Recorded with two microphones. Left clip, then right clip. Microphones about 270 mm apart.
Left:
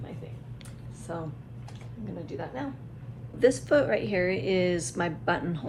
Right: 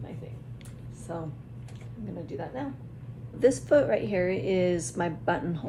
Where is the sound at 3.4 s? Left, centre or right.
Left.